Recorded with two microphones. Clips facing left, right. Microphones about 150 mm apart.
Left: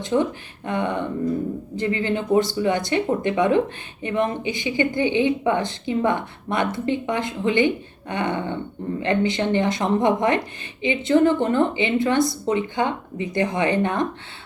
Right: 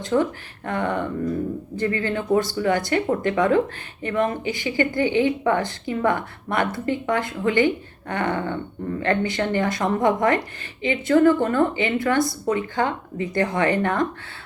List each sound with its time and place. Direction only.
0.0 s speech: 20° left (ahead or behind)